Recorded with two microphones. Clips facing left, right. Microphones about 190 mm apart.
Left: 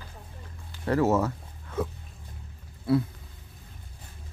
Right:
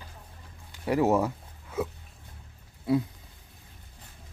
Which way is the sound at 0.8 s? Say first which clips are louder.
Even; 15° right (ahead or behind).